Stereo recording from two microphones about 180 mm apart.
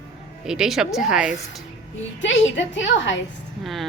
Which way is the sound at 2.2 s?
90° left.